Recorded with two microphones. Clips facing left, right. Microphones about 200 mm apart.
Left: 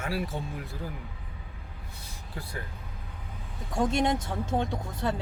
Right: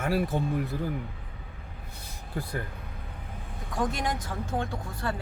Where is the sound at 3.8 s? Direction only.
25° left (ahead or behind).